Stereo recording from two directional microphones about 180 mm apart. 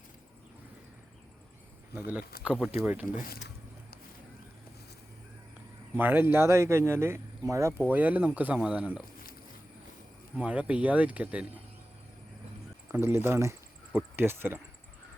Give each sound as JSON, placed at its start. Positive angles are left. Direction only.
{"t": 1.9, "sound": "speech", "side_deg": -10}
{"t": 3.2, "sound": "speech", "side_deg": 55}
{"t": 6.0, "sound": "speech", "side_deg": -10}
{"t": 10.3, "sound": "speech", "side_deg": -5}
{"t": 12.9, "sound": "speech", "side_deg": -15}